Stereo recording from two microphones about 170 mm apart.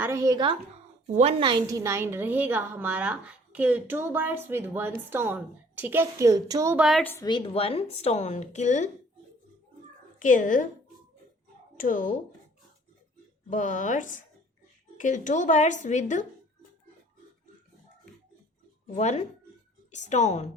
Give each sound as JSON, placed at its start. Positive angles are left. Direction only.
{"t": 0.0, "sound": "a woman's voice", "side_deg": -15}
{"t": 1.0, "sound": "a woman's voice", "side_deg": -40}
{"t": 6.7, "sound": "a woman's voice", "side_deg": 0}
{"t": 7.0, "sound": "a woman's voice", "side_deg": 15}
{"t": 7.3, "sound": "a woman's voice", "side_deg": 30}
{"t": 10.2, "sound": "a woman's voice", "side_deg": 50}
{"t": 11.8, "sound": "a woman's voice", "side_deg": 50}
{"t": 13.5, "sound": "a woman's voice", "side_deg": 45}
{"t": 18.9, "sound": "a woman's voice", "side_deg": 40}